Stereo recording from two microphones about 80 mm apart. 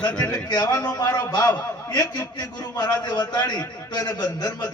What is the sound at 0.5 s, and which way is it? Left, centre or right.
Speech, left.